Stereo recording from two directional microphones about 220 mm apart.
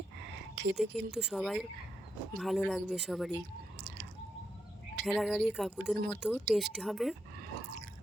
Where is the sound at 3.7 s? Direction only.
50° right (ahead or behind).